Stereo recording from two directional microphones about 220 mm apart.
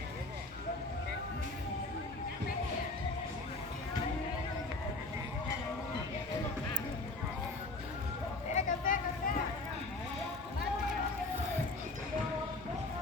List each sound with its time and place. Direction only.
8.5 s vehicle: 40° left (ahead or behind)